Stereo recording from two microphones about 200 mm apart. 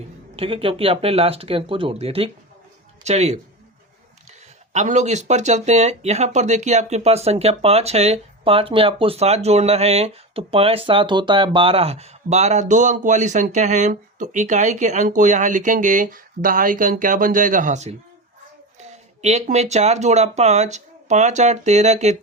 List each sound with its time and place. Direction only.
0.3 s speech: 25° right (ahead or behind)